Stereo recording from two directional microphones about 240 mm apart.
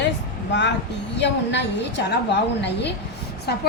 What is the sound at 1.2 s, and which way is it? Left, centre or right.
A woman's voice, left.